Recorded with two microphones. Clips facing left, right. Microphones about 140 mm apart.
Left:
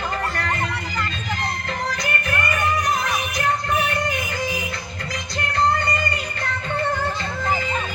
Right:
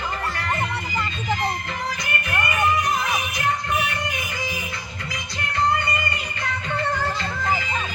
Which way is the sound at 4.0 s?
35° left (ahead or behind).